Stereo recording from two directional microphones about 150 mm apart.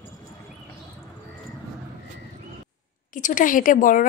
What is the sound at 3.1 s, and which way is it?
Speech, 60° left (ahead or behind).